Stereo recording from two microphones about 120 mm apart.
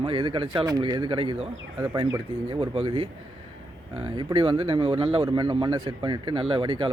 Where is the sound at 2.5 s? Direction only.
45° right (ahead or behind).